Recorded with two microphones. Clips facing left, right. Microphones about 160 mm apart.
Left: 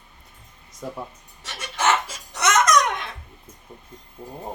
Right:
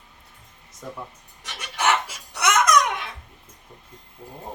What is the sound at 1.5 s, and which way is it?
Laughter, 15° right (ahead or behind).